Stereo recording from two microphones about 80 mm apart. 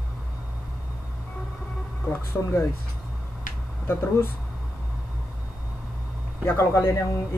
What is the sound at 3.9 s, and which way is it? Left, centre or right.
Speech, left.